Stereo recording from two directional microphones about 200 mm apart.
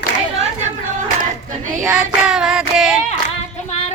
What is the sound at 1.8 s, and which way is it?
Child singing, 5° right (ahead or behind).